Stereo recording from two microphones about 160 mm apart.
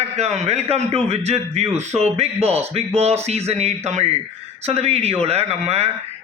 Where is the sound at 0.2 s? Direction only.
40° right (ahead or behind).